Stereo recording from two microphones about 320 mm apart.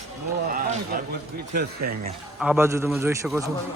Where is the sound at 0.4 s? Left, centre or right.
Right.